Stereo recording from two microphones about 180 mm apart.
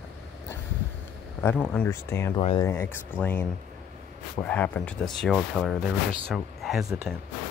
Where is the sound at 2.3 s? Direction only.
30° left (ahead or behind).